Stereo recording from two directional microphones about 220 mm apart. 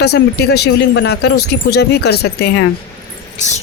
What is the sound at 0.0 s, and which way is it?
Speech, 45° left (ahead or behind).